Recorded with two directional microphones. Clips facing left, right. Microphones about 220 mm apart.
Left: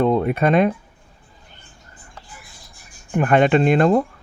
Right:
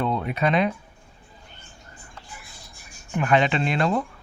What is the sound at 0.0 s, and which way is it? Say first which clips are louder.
Speech: left 7 dB; 45° left (ahead or behind).